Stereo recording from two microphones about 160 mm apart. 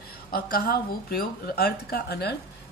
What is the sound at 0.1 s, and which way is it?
A woman's voice, 65° left (ahead or behind).